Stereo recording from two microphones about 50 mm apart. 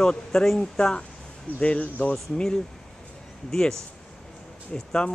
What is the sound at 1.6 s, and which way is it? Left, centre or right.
Speech, left.